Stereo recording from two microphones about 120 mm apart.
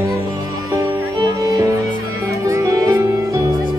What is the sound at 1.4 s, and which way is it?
Music, 30° right (ahead or behind).